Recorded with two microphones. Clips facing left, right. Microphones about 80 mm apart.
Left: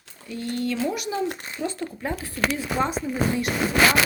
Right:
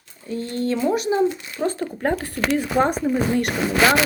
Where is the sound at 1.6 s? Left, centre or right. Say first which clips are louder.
Right 6 dB; right.